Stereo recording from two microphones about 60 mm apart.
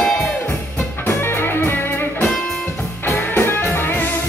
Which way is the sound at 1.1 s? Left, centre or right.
Left.